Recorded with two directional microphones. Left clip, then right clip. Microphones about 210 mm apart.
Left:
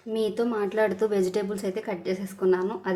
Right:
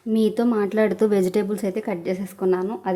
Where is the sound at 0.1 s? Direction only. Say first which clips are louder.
Right 5 dB; 40° right (ahead or behind).